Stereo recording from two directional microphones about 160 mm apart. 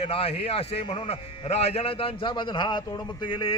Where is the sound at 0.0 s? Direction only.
40° left (ahead or behind).